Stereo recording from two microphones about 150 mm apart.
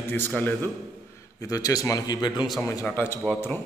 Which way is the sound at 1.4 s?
25° left (ahead or behind).